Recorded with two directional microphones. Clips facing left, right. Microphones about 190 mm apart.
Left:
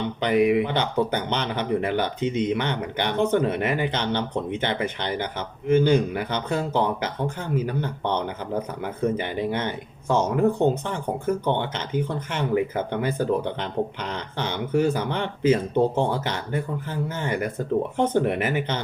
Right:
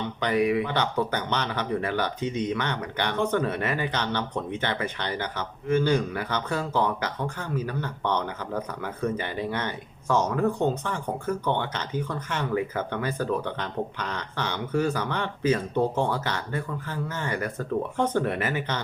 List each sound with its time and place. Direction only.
0.2 s speech: 20° left (ahead or behind)